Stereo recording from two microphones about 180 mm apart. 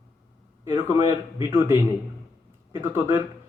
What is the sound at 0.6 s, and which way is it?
Speech, 15° right (ahead or behind).